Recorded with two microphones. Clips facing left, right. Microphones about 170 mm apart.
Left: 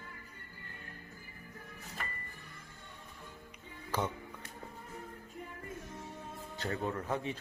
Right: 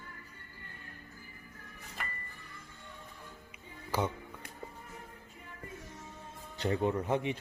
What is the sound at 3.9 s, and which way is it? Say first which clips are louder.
Speech: right 2 dB; 10° right (ahead or behind).